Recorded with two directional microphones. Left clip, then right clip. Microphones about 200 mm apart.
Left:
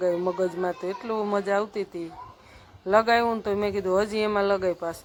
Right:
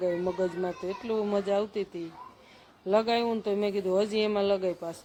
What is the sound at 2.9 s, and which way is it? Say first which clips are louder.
Speech: left 5 dB; 5° left (ahead or behind).